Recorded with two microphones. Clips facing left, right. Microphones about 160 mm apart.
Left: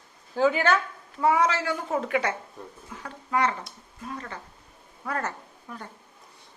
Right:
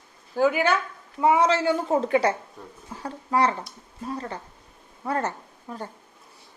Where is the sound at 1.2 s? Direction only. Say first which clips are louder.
Right 3 dB; 25° right (ahead or behind).